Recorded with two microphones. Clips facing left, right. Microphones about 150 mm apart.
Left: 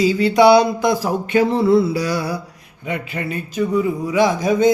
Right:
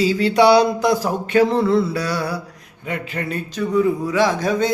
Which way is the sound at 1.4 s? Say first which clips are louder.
Left 1 dB; 5° left (ahead or behind).